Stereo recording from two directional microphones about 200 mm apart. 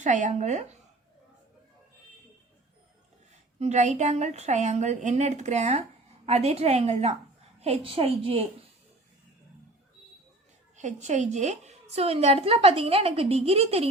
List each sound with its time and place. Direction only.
0.0 s a woman's voice: 40° right (ahead or behind)
3.6 s a woman's voice: 35° right (ahead or behind)
10.8 s a woman's voice: 35° right (ahead or behind)